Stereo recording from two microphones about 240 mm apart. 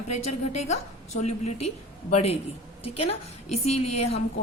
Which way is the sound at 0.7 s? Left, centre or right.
Left.